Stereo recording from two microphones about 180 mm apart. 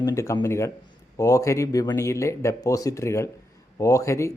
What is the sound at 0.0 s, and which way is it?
A man's voice, 15° left (ahead or behind).